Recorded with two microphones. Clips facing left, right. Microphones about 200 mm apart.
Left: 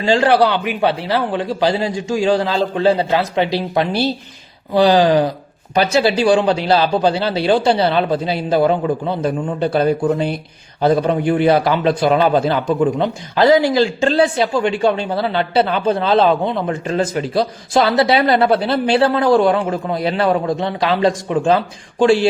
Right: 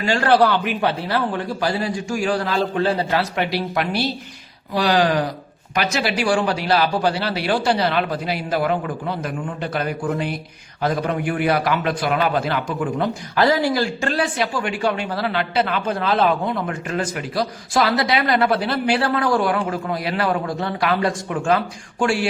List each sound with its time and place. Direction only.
0.2 s speech: 15° left (ahead or behind)